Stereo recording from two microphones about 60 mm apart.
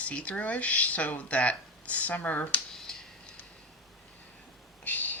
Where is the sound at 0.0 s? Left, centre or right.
Left.